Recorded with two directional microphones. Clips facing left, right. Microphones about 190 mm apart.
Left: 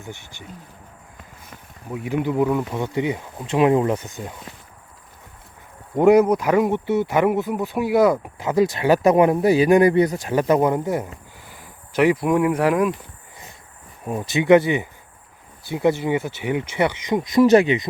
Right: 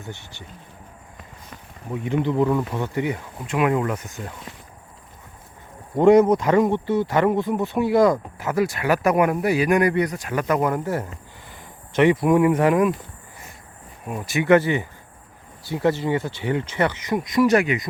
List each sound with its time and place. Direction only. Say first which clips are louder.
0.0 s speech: even; 10° left (ahead or behind)
1.9 s speech: even; 5° left (ahead or behind)
6.0 s speech: even; 10° left (ahead or behind)
14.1 s speech: left 2 dB; 20° left (ahead or behind)
17.2 s speech: left 4 dB; 30° left (ahead or behind)